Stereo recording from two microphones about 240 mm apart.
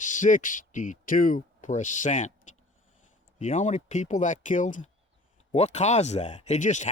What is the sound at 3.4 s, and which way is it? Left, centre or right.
Speech, left.